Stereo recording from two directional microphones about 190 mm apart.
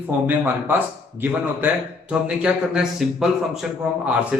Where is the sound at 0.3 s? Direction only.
10° right (ahead or behind).